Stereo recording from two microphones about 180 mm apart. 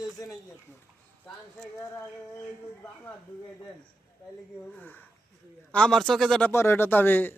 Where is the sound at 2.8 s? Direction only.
10° left (ahead or behind).